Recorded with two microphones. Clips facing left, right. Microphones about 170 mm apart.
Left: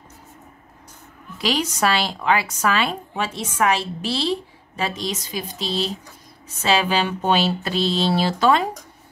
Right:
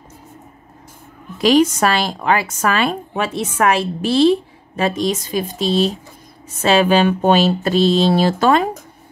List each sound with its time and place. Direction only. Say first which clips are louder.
1.4 s a woman's voice: right 9 dB; 50° right (ahead or behind)